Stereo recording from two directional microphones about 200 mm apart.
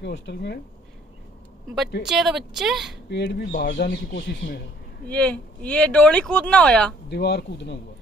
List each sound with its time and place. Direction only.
0.0 s speech: 60° left (ahead or behind)
2.0 s speech: centre (ahead or behind)
3.1 s speech: 55° left (ahead or behind)
5.0 s speech: 5° left (ahead or behind)
7.1 s speech: 55° left (ahead or behind)